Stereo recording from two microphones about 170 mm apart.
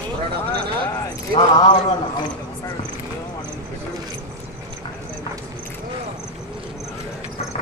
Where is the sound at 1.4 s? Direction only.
25° left (ahead or behind).